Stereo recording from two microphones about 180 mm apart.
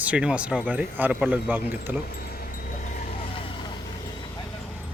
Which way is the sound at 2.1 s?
55° left (ahead or behind).